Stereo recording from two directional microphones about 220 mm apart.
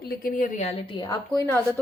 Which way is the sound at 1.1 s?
10° left (ahead or behind).